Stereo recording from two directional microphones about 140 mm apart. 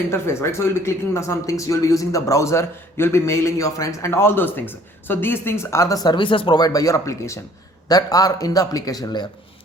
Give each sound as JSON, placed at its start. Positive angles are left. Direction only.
{"t": 0.1, "sound": "speech", "side_deg": 20}